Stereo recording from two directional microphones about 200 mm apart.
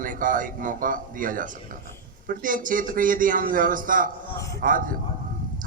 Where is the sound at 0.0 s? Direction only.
40° right (ahead or behind).